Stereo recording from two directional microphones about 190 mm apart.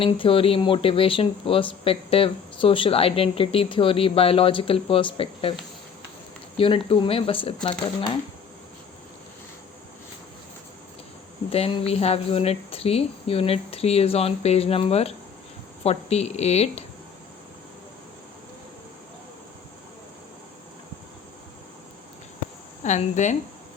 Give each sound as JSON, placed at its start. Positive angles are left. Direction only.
{"t": 0.0, "sound": "speech", "side_deg": 30}
{"t": 6.6, "sound": "speech", "side_deg": 30}
{"t": 11.5, "sound": "speech", "side_deg": 30}
{"t": 22.8, "sound": "speech", "side_deg": 40}